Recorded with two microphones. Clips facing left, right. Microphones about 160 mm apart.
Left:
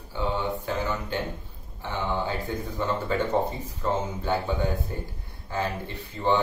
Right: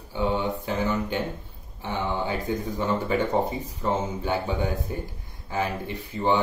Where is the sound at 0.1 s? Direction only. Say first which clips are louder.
Right 3 dB; 15° right (ahead or behind).